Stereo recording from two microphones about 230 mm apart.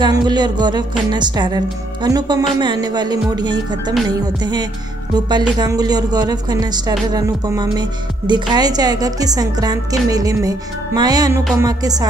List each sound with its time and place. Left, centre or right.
0.0 s music: centre
2.0 s a woman's voice: centre
5.1 s a woman's voice: centre